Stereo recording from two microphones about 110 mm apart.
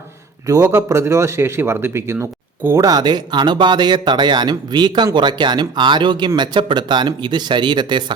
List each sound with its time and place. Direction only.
0.4 s a man's voice: 30° right (ahead or behind)
2.8 s speech: 40° right (ahead or behind)